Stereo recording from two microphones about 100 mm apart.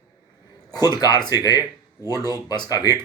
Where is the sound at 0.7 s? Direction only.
40° left (ahead or behind).